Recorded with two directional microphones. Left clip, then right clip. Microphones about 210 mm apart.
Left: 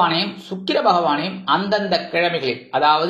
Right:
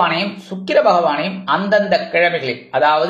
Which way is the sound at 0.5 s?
25° left (ahead or behind).